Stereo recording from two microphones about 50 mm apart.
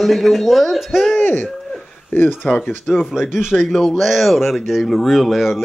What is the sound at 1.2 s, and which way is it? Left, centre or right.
Speech, left.